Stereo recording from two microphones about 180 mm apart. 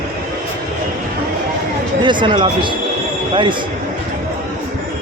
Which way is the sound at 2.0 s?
25° right (ahead or behind).